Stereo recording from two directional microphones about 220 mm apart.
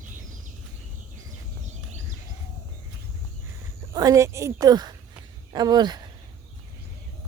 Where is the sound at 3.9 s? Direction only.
15° right (ahead or behind).